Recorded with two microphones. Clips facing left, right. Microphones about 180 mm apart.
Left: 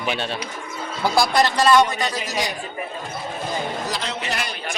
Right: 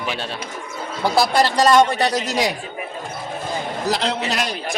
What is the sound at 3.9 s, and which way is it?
Speech, 75° right (ahead or behind).